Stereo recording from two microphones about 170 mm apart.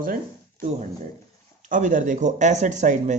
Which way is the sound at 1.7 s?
45° right (ahead or behind).